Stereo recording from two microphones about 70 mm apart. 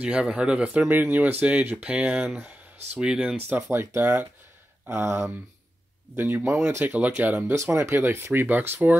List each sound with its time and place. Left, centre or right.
0.0 s speech: centre
0.8 s speech: right
3.7 s speech: right
7.5 s speech: right